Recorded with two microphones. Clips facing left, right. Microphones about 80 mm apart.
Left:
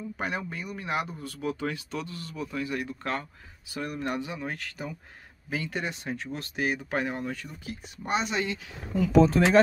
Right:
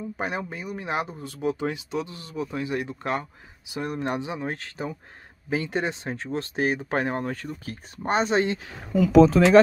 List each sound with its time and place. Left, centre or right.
0.5 s speech: right
8.9 s speech: right